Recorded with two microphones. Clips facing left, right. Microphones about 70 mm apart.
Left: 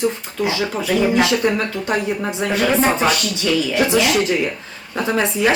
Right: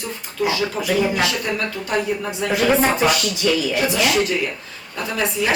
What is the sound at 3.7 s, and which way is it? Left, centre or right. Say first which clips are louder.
Speech: left 3 dB; left.